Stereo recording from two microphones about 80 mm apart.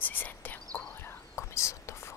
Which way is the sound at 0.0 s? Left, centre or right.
Left.